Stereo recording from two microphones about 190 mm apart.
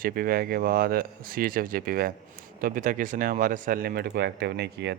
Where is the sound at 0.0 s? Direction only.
50° right (ahead or behind).